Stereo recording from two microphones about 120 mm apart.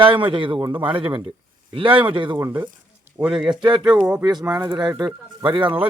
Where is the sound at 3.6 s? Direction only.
40° right (ahead or behind).